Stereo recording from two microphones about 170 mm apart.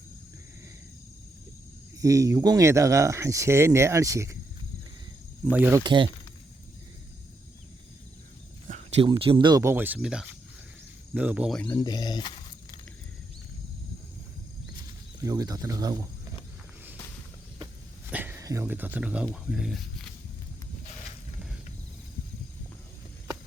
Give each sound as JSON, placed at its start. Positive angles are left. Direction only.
{"t": 2.0, "sound": "speech", "side_deg": -20}
{"t": 5.5, "sound": "speech", "side_deg": -10}
{"t": 5.8, "sound": "speech", "side_deg": -25}
{"t": 9.0, "sound": "speech", "side_deg": -35}
{"t": 11.5, "sound": "speech", "side_deg": 10}
{"t": 11.8, "sound": "speech", "side_deg": 25}
{"t": 15.2, "sound": "speech", "side_deg": -20}
{"t": 18.1, "sound": "speech", "side_deg": -10}